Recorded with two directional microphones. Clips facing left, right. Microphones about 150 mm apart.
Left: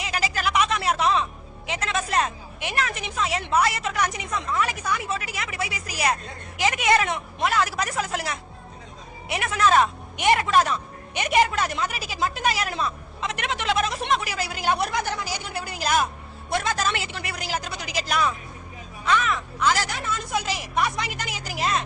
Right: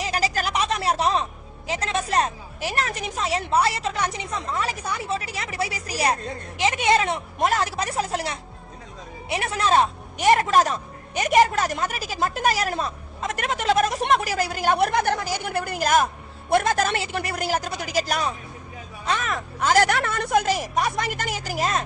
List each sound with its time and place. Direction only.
0.0 s a woman's voice: 35° right (ahead or behind)
7.3 s speech: 45° right (ahead or behind)
7.7 s speech: 30° right (ahead or behind)